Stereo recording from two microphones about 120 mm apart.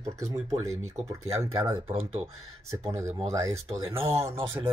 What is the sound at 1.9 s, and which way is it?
Speech, 50° right (ahead or behind).